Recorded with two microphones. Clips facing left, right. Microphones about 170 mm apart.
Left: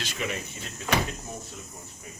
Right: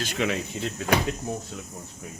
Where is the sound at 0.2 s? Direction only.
90° right.